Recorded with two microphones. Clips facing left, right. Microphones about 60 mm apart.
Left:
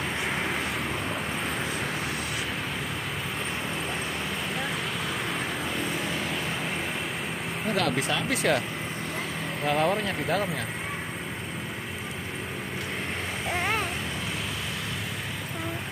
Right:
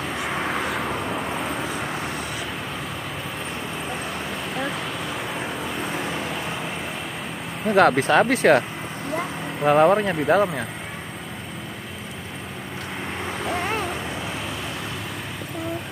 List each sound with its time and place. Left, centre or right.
0.2 s vehicle: centre
6.0 s vehicle: right
7.7 s speech: right
9.7 s speech: right